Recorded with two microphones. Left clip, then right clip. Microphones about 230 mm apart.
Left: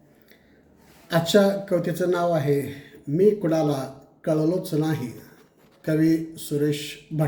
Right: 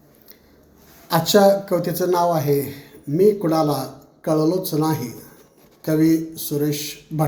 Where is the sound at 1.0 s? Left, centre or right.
Centre.